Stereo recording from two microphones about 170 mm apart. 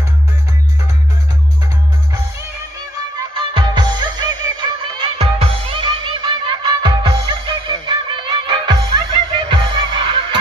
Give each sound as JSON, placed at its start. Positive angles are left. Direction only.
{"t": 3.3, "sound": "music", "side_deg": -30}